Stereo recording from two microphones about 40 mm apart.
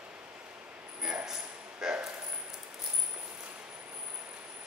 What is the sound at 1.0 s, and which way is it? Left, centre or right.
Speech, centre.